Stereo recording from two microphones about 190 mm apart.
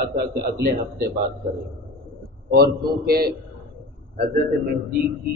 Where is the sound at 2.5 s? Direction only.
55° right (ahead or behind).